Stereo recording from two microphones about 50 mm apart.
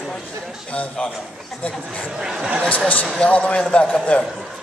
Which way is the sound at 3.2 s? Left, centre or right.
Left.